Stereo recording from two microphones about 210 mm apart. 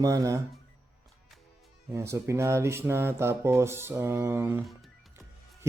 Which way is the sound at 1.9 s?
15° right (ahead or behind).